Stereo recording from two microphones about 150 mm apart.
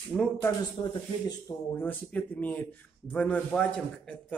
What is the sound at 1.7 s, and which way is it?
Speech, 10° left (ahead or behind).